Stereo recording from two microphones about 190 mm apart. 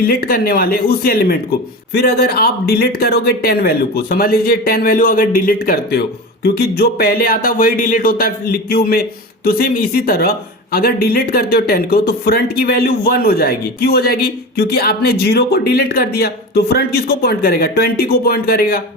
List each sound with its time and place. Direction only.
0.0 s speech: 50° left (ahead or behind)